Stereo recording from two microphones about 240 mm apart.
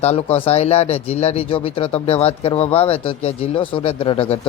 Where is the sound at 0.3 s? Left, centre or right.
Left.